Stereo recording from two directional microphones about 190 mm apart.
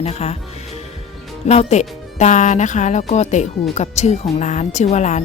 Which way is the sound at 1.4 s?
35° left (ahead or behind).